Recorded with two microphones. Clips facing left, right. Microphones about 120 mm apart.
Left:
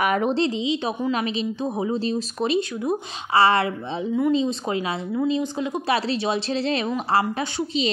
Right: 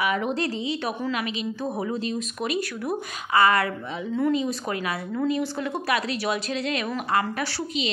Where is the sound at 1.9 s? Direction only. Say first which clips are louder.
Left 4 dB; 30° left (ahead or behind).